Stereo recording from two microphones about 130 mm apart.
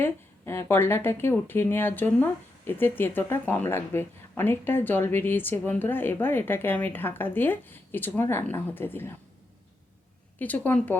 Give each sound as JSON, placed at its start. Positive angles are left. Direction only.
{"t": 0.0, "sound": "speech", "side_deg": 15}
{"t": 10.3, "sound": "speech", "side_deg": 10}